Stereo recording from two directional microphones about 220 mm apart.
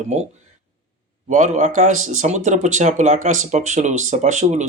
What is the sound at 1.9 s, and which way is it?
Speech, 70° right (ahead or behind).